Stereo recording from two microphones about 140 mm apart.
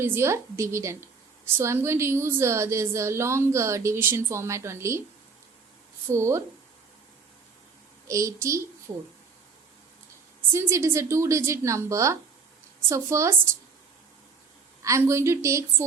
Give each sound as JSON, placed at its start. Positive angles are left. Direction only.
{"t": 0.0, "sound": "a woman's voice", "side_deg": -15}
{"t": 6.1, "sound": "a woman's voice", "side_deg": -20}
{"t": 8.0, "sound": "a woman's voice", "side_deg": -20}
{"t": 10.5, "sound": "a woman's voice", "side_deg": -20}
{"t": 14.8, "sound": "a woman's voice", "side_deg": -20}